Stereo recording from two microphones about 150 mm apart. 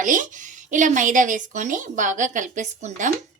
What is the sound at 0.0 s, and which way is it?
Speech, 60° right (ahead or behind).